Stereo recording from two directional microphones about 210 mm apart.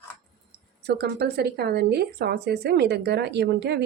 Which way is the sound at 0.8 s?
50° right (ahead or behind).